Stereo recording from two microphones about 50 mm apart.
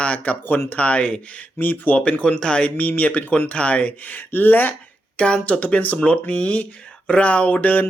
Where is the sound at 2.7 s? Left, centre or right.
Left.